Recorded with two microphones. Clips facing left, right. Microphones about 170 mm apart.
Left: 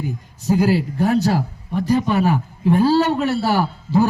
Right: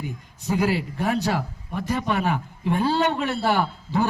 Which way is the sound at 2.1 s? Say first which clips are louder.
Left 6 dB; 40° left (ahead or behind).